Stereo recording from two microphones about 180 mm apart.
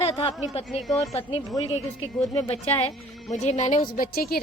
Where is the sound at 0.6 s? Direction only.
Centre (ahead or behind).